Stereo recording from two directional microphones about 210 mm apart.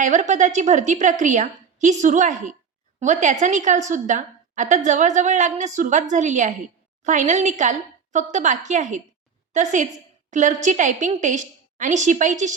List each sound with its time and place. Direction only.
0.0 s a woman's voice: 35° right (ahead or behind)